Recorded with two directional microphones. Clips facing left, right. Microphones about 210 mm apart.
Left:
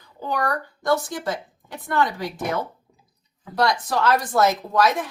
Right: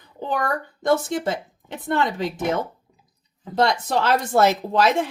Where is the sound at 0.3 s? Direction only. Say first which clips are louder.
Even; 20° right (ahead or behind).